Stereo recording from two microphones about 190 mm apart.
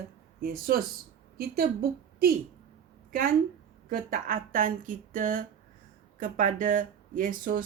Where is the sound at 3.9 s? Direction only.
45° right (ahead or behind).